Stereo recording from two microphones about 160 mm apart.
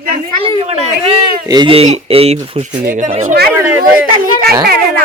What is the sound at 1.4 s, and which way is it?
Speech, 25° right (ahead or behind).